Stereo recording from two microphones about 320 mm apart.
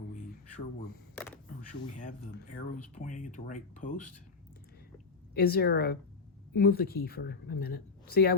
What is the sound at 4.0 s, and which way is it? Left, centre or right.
Speech, left.